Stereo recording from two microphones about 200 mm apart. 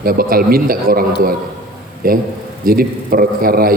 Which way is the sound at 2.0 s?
45° right (ahead or behind).